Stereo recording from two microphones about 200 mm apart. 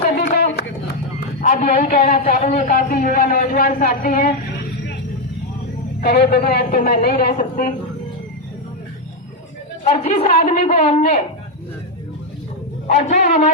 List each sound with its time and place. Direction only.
1.4 s speech: 40° left (ahead or behind)
6.0 s speech: 50° left (ahead or behind)
9.8 s a woman's voice: 30° left (ahead or behind)
12.9 s a woman's voice: 35° left (ahead or behind)